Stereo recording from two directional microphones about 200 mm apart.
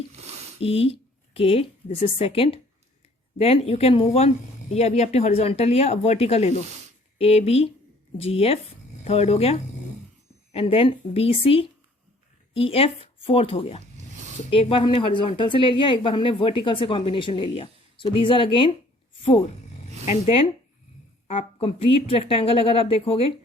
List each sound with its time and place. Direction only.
0.1 s a sound: 30° right (ahead or behind)
0.6 s a woman's voice: 30° left (ahead or behind)
20.1 s a woman's voice: 30° left (ahead or behind)